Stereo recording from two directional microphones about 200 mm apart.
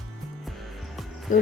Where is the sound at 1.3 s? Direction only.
40° left (ahead or behind).